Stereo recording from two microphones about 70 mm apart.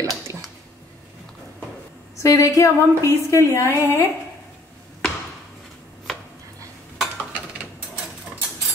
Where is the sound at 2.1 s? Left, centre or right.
Left.